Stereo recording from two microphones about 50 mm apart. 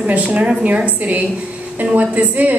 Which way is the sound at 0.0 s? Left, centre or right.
Right.